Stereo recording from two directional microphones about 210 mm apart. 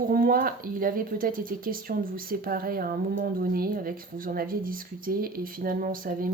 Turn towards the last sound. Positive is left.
turn(degrees=-40)  # may be behind; listen again after turning